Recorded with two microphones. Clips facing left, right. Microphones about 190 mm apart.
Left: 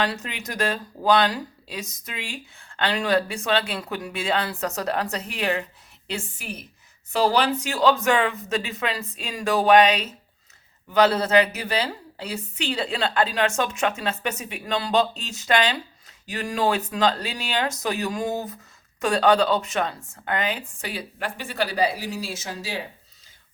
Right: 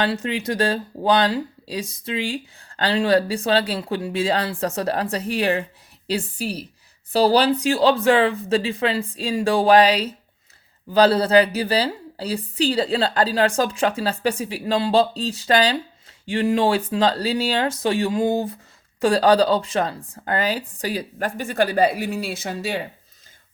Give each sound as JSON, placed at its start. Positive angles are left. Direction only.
{"t": 0.0, "sound": "speech", "side_deg": -30}